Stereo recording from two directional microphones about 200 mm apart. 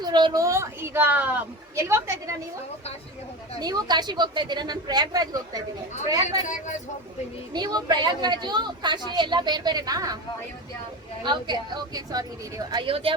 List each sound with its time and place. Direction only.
0.0 s a woman's voice: 20° right (ahead or behind)
3.6 s a woman's voice: 20° right (ahead or behind)
7.5 s a woman's voice: 20° right (ahead or behind)
11.2 s a woman's voice: 20° right (ahead or behind)